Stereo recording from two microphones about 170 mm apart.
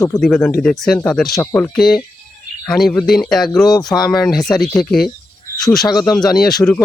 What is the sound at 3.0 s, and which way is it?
Speech, centre (ahead or behind).